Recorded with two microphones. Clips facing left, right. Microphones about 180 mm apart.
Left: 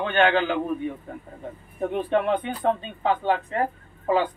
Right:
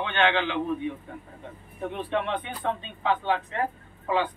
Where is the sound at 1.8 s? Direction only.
40° left (ahead or behind).